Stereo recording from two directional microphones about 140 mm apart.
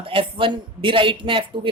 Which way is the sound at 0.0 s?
40° right (ahead or behind).